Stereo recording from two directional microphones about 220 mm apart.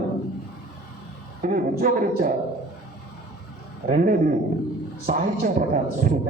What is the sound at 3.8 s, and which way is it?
A man's voice, 40° right (ahead or behind).